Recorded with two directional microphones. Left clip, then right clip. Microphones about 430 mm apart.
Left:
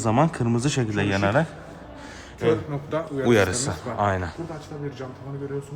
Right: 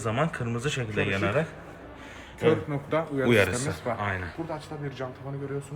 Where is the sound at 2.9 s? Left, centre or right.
Centre.